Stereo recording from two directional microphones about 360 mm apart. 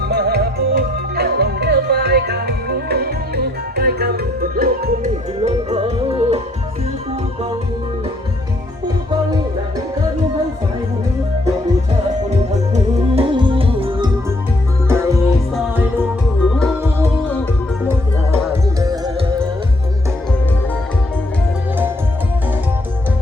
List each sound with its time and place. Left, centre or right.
0.0 s music: right
12.7 s music: centre
18.5 s music: centre